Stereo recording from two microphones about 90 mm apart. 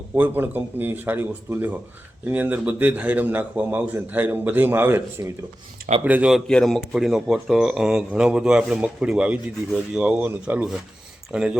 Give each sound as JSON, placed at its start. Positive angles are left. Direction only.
{"t": 0.2, "sound": "a man's voice", "side_deg": -20}
{"t": 6.5, "sound": "a man's voice", "side_deg": 5}
{"t": 6.9, "sound": "a man's voice", "side_deg": -5}